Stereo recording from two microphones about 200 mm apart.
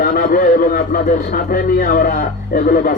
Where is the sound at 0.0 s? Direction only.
45° left (ahead or behind).